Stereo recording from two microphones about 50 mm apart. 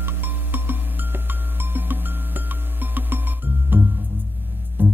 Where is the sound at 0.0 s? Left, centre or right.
Right.